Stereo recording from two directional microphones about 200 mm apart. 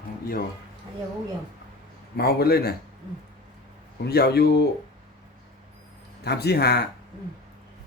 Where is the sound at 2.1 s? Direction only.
50° left (ahead or behind).